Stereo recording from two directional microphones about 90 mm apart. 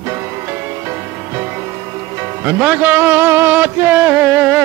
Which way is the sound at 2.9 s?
25° right (ahead or behind).